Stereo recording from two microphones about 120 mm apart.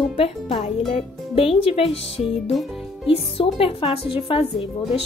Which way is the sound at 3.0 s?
50° left (ahead or behind).